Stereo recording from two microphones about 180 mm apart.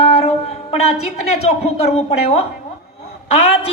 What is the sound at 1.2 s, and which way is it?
A man's voice, 35° left (ahead or behind).